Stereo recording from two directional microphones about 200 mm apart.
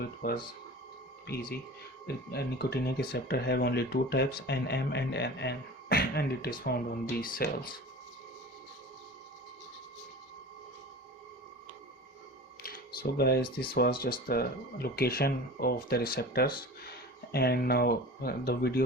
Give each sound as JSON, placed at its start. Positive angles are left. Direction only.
{"t": 0.2, "sound": "speech", "side_deg": 50}
{"t": 12.6, "sound": "a sound", "side_deg": 45}
{"t": 13.7, "sound": "speech", "side_deg": 50}